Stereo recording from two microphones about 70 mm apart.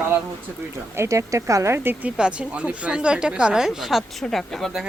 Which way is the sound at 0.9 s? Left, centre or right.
Right.